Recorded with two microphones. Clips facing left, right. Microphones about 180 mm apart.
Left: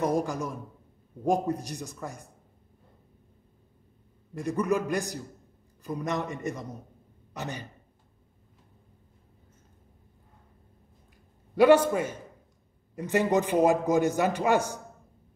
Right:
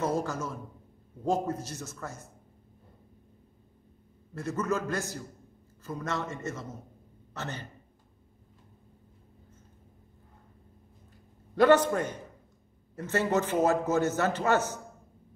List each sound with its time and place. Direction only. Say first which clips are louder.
0.0 s a man's voice: left 3 dB; 15° left (ahead or behind)
4.3 s a man's voice: left 4 dB; 15° left (ahead or behind)
11.5 s a man's voice: left 2 dB; 10° left (ahead or behind)